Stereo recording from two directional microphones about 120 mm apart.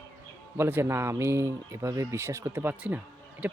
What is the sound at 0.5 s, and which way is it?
Speech, 20° right (ahead or behind).